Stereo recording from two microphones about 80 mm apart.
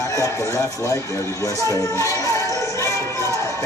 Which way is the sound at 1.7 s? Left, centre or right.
Left.